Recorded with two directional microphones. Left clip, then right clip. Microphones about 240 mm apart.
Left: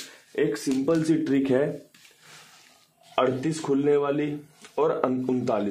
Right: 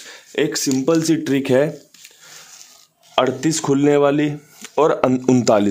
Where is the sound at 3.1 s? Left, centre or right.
Right.